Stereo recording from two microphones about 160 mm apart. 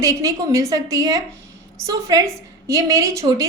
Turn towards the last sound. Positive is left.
turn(degrees=-25)  # may be behind; listen again after turning